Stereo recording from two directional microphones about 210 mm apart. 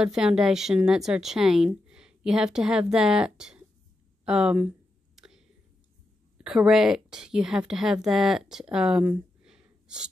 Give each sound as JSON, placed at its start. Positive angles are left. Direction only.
{"t": 0.0, "sound": "a woman's voice", "side_deg": -5}
{"t": 5.1, "sound": "whispering", "side_deg": 0}
{"t": 6.3, "sound": "a woman's voice", "side_deg": -5}